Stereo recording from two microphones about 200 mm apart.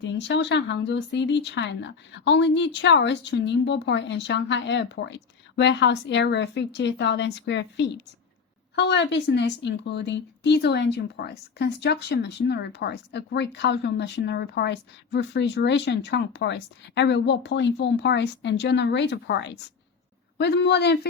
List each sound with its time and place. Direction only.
0.0 s a woman's voice: 60° left (ahead or behind)